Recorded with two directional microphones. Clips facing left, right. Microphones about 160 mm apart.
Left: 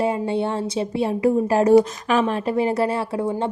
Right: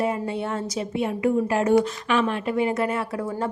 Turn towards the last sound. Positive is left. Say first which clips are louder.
# left 3 dB
turn(degrees=30)  # may be behind; listen again after turning